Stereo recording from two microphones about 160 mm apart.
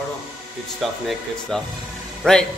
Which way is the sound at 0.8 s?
Centre (ahead or behind).